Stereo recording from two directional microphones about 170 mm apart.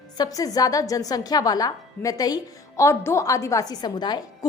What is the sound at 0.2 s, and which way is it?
A woman's voice, 20° left (ahead or behind).